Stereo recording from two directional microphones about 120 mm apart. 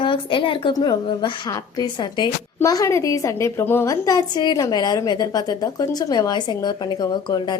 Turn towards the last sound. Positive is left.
turn(degrees=40)  # may be behind; listen again after turning